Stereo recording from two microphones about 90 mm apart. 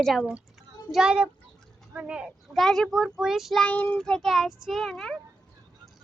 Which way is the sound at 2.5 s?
5° left (ahead or behind).